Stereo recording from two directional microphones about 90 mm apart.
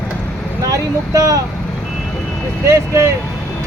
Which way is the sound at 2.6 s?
35° right (ahead or behind).